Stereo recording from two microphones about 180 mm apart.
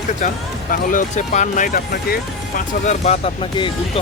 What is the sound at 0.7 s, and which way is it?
Speech, 50° left (ahead or behind).